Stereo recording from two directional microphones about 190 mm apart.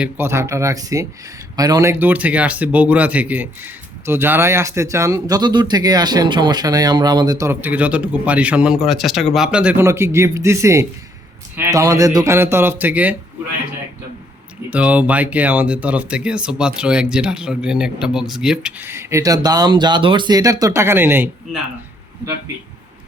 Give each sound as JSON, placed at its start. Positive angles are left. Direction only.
{"t": 0.0, "sound": "speech", "side_deg": -15}
{"t": 14.7, "sound": "speech", "side_deg": -5}